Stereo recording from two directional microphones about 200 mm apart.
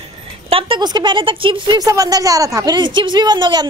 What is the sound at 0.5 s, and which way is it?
A woman's voice, 25° right (ahead or behind).